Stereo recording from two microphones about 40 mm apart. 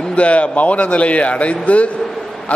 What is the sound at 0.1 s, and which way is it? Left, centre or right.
A man's voice, left.